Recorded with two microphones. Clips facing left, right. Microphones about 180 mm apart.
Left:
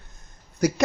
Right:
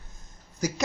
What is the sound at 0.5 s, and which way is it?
Speech, 65° left (ahead or behind).